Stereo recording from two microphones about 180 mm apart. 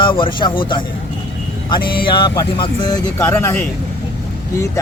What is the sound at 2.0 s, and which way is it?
Speech, 25° left (ahead or behind).